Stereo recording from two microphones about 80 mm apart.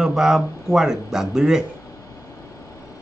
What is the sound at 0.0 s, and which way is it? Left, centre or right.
A man's voice, centre.